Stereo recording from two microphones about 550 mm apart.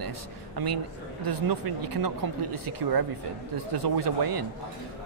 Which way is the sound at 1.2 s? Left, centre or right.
Right.